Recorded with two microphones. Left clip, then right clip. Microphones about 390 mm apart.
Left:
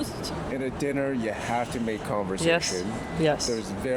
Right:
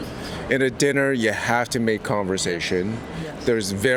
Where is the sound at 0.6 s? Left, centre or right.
Right.